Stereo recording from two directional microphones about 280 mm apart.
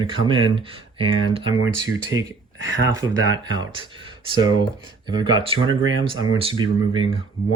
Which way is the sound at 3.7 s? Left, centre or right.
Centre.